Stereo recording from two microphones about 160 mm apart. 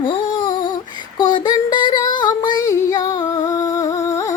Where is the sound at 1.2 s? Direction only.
25° left (ahead or behind).